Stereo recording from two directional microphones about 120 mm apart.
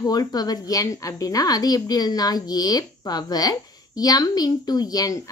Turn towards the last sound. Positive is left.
turn(degrees=30)  # may be behind; listen again after turning